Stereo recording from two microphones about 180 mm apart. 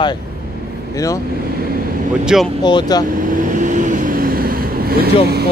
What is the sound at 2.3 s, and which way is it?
Speech, centre (ahead or behind).